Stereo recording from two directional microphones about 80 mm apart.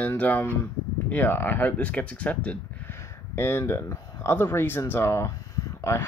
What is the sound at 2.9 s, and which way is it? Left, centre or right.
Speech, left.